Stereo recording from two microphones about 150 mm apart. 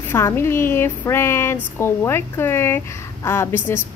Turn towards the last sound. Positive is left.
turn(degrees=15)  # may be behind; listen again after turning